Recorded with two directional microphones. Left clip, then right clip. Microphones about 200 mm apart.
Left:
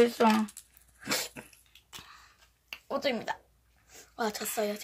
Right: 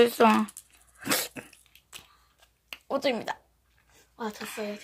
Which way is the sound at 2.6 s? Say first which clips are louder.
Right 3 dB; 35° right (ahead or behind).